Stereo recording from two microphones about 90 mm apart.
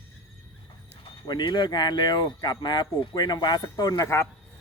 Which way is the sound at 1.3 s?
55° left (ahead or behind).